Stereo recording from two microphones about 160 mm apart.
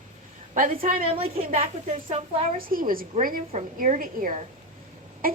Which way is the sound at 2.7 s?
60° right (ahead or behind).